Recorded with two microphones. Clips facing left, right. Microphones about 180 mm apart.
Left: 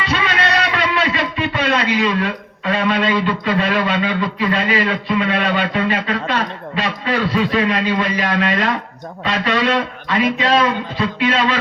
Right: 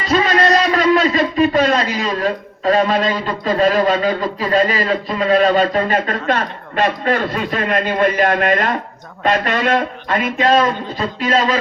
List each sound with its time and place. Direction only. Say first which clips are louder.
0.0 s a man's voice: right 5 dB; 40° right (ahead or behind)